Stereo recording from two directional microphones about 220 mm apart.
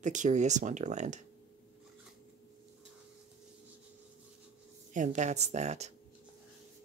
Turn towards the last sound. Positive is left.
turn(degrees=-30)  # may be behind; listen again after turning